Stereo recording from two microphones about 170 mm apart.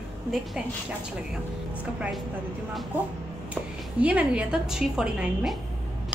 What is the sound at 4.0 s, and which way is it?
A woman's voice, 10° right (ahead or behind).